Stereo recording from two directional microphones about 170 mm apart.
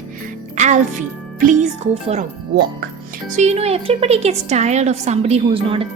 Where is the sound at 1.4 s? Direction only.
50° right (ahead or behind).